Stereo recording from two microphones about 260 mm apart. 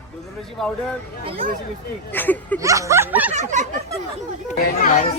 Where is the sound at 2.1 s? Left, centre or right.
Centre.